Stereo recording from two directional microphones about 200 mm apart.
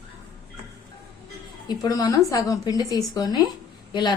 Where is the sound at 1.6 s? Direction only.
20° left (ahead or behind).